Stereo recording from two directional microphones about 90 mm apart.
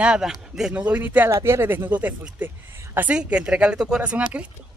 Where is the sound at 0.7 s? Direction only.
15° right (ahead or behind).